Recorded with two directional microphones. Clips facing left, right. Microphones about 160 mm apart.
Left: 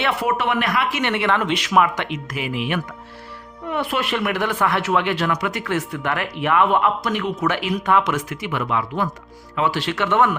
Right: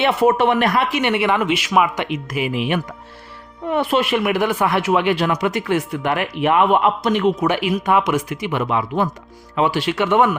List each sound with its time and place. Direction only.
0.0 s speech: 25° right (ahead or behind)
0.9 s speech: 15° right (ahead or behind)
4.0 s speech: 10° right (ahead or behind)